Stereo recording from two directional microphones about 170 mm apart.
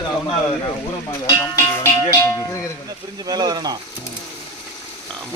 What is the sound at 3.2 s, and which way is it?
Speech, 25° right (ahead or behind).